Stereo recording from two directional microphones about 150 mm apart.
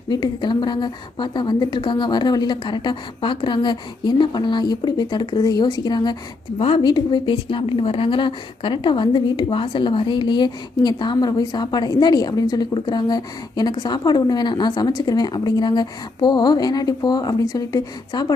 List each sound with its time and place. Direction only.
0.1 s a woman's voice: 30° left (ahead or behind)